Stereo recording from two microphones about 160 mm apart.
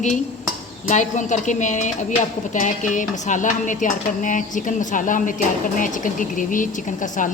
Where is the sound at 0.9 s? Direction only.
50° left (ahead or behind).